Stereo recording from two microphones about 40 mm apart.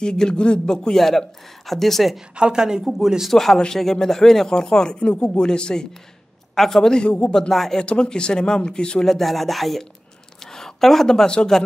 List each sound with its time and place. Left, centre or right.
0.0 s speech: left
0.9 s speech: centre
2.3 s a woman's voice: right
2.8 s speech: centre
3.3 s speech: centre
3.5 s speech: centre
6.5 s speech: centre
6.8 s speech: left
7.5 s speech: centre
7.8 s speech: left
9.0 s a woman's voice: centre